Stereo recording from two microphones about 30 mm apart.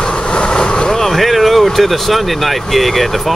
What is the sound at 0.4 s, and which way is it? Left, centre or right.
Vehicle, left.